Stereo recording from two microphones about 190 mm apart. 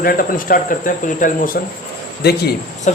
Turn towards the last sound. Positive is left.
turn(degrees=40)  # may be behind; listen again after turning